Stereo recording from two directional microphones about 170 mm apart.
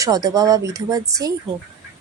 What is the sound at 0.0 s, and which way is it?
Speech, 20° right (ahead or behind).